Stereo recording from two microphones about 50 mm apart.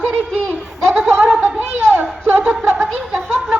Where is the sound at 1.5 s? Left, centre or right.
Centre.